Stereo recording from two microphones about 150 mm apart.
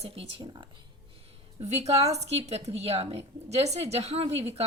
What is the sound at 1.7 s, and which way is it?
A woman's voice, 45° right (ahead or behind).